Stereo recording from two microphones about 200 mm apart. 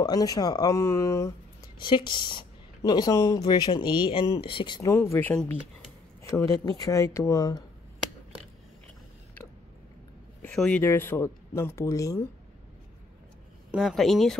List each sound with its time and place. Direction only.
0.0 s speech: 20° left (ahead or behind)
4.9 s speech: 10° left (ahead or behind)
10.4 s speech: 5° left (ahead or behind)
13.7 s speech: centre (ahead or behind)